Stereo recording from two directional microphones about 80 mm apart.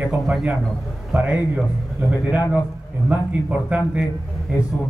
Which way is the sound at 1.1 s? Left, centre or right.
Centre.